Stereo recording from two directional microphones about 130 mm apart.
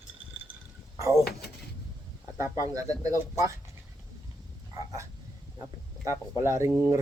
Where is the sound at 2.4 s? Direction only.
25° right (ahead or behind).